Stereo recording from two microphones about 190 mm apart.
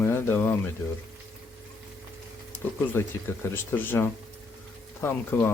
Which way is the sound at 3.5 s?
10° left (ahead or behind).